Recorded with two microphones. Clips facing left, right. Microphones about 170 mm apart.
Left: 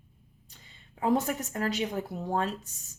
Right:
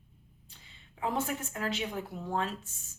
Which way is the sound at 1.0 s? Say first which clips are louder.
Left 6 dB; 40° left (ahead or behind).